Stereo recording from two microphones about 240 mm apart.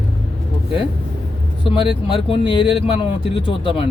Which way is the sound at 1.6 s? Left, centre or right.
Left.